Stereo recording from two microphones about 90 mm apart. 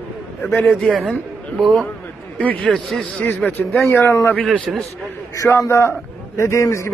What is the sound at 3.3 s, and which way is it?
Speech, 15° left (ahead or behind).